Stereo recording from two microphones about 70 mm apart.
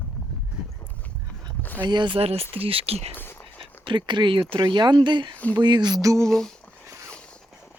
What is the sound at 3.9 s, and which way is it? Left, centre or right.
Speech, right.